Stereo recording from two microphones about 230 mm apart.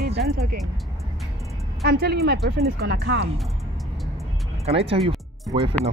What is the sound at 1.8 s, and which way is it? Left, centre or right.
Speech, right.